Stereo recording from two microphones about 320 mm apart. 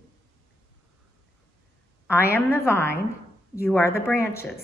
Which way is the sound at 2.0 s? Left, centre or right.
Centre.